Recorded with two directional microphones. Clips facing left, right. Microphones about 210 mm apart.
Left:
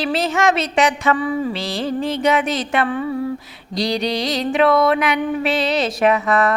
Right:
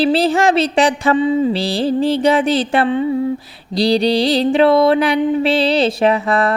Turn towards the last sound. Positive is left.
turn(degrees=-30)  # may be behind; listen again after turning